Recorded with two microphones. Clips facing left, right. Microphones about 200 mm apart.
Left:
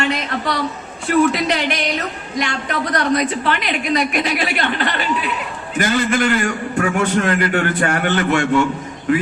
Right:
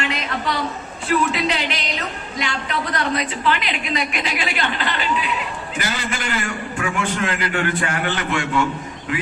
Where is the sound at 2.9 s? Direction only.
45° left (ahead or behind).